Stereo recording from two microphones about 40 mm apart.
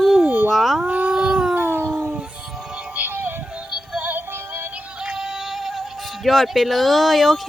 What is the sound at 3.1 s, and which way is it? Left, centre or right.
Music, right.